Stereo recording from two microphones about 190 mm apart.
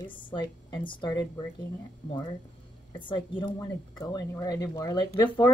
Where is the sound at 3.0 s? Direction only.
25° left (ahead or behind).